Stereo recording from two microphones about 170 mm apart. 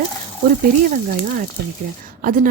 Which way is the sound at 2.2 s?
55° right (ahead or behind).